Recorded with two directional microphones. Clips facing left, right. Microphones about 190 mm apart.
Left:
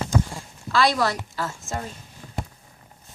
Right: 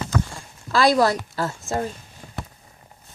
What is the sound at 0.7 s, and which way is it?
Speech, 35° right (ahead or behind).